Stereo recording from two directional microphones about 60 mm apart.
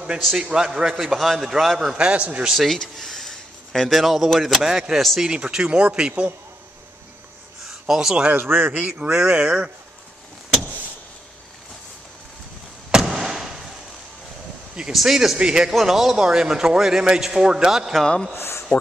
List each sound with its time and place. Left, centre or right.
0.4 s a man's voice: centre
2.5 s speech: centre
2.8 s a sound: centre
4.0 s speech: centre
5.3 s a man's voice: centre
7.8 s speech: centre
8.2 s speech: right
9.0 s a man's voice: centre
12.9 s a sound: centre
14.9 s a man's voice: centre
15.7 s a man's voice: centre
18.0 s speech: centre
18.3 s speech: left